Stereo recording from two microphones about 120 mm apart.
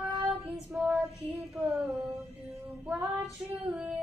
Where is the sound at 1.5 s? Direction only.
5° right (ahead or behind).